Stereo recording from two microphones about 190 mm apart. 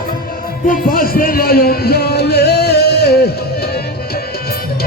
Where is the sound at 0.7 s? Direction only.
50° left (ahead or behind).